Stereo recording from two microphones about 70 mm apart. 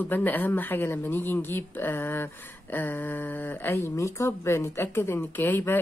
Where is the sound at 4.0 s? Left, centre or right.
Left.